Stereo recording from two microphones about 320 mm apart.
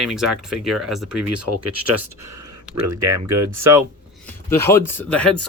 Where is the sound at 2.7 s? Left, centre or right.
Right.